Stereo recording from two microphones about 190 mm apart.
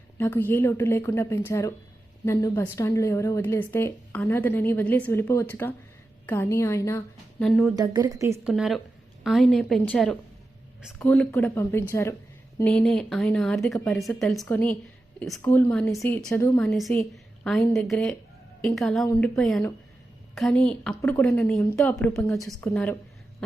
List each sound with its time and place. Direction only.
0.2 s a woman's voice: 10° left (ahead or behind)
7.8 s a woman's voice: 20° right (ahead or behind)
8.4 s a woman's voice: centre (ahead or behind)
16.7 s a woman's voice: centre (ahead or behind)